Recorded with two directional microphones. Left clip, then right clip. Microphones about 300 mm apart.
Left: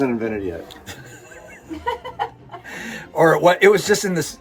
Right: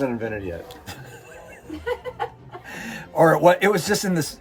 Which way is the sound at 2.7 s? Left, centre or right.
Right.